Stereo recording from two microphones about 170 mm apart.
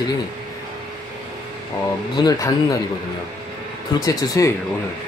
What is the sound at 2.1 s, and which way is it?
Speech, 20° left (ahead or behind).